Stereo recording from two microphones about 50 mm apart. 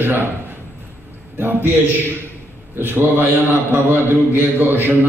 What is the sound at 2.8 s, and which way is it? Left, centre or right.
A man's voice, right.